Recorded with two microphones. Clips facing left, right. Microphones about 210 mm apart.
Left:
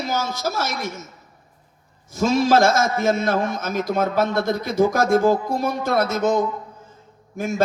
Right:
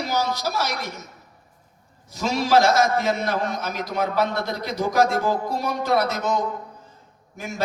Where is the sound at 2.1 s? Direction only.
50° left (ahead or behind).